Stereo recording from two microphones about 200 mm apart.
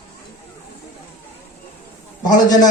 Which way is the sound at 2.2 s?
20° left (ahead or behind).